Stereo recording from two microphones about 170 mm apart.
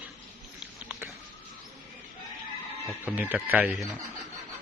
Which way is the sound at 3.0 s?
10° right (ahead or behind).